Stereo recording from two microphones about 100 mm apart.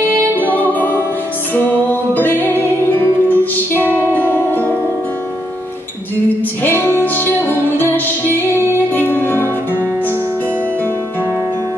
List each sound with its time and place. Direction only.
0.4 s music: 20° left (ahead or behind)
6.6 s music: 20° left (ahead or behind)